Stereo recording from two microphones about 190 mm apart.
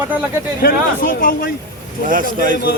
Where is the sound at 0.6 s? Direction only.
45° left (ahead or behind).